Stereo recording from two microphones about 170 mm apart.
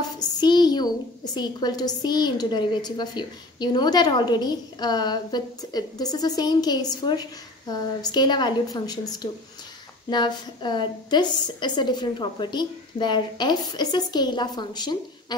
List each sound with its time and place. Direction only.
0.4 s a child's voice: 25° left (ahead or behind)